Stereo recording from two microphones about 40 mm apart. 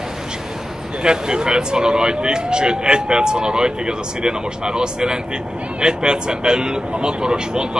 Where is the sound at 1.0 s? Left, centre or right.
Centre.